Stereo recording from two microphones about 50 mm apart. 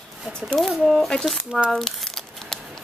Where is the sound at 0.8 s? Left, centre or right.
Centre.